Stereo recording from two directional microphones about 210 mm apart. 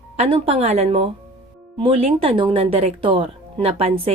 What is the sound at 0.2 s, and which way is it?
Speech, 30° right (ahead or behind).